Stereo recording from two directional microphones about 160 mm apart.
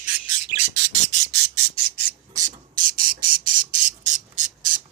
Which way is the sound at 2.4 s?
55° right (ahead or behind).